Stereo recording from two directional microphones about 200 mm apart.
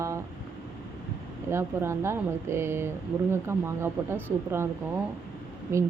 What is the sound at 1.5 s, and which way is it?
Speech, 15° right (ahead or behind).